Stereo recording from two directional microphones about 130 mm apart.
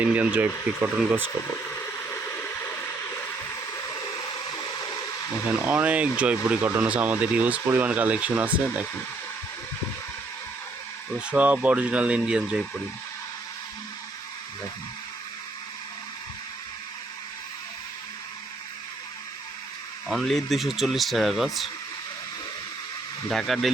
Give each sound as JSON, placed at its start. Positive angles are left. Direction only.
{"t": 0.0, "sound": "speech", "side_deg": -10}
{"t": 1.7, "sound": "a sound", "side_deg": 20}
{"t": 5.5, "sound": "speech", "side_deg": -10}
{"t": 11.3, "sound": "speech", "side_deg": -10}
{"t": 20.1, "sound": "speech", "side_deg": 0}
{"t": 23.3, "sound": "speech", "side_deg": 0}